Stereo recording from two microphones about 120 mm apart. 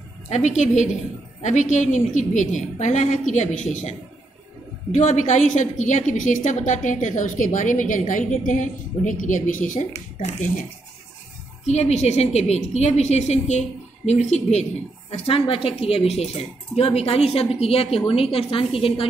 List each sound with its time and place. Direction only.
0.3 s a woman's voice: 90° left
4.9 s a woman's voice: 90° left
11.6 s a woman's voice: 70° left (ahead or behind); by 19.0 s 50° left (ahead or behind)